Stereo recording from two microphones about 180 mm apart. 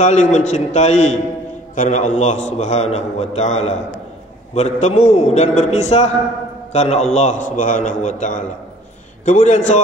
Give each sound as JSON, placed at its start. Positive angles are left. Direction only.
{"t": 0.0, "sound": "a man's voice", "side_deg": 40}